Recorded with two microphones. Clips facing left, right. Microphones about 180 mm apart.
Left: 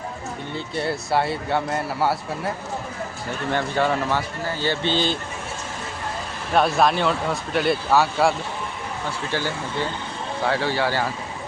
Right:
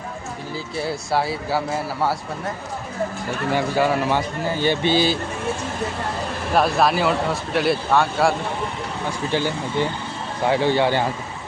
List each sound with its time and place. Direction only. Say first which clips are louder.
0.5 s speech: even; centre (ahead or behind)
3.5 s a man's voice: right 2 dB; 10° right (ahead or behind)
6.5 s speech: even; centre (ahead or behind)
9.3 s a man's voice: right 5 dB; 15° right (ahead or behind)